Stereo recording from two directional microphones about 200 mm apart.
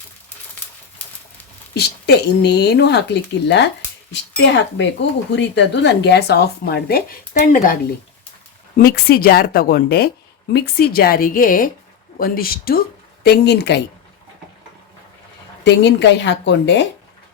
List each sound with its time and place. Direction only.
1.7 s speech: 55° left (ahead or behind)
8.8 s speech: 50° left (ahead or behind)
15.6 s speech: 60° left (ahead or behind)